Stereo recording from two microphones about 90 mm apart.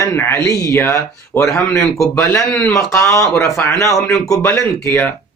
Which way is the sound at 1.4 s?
5° left (ahead or behind).